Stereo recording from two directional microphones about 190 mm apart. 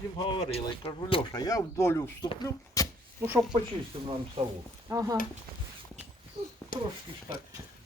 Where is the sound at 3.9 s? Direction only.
30° right (ahead or behind).